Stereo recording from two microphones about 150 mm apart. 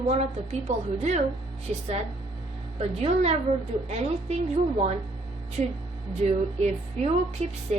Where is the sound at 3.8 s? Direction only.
45° right (ahead or behind).